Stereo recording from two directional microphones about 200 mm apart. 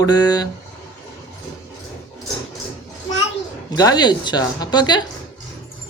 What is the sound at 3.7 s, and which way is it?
Speech, 20° left (ahead or behind).